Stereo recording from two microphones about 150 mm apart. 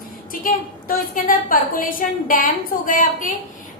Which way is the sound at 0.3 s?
65° left (ahead or behind).